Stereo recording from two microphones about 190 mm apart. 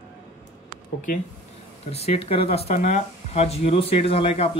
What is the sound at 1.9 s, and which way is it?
Speech, 30° left (ahead or behind).